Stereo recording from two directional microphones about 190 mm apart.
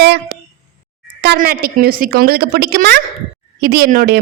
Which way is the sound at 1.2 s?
55° right (ahead or behind).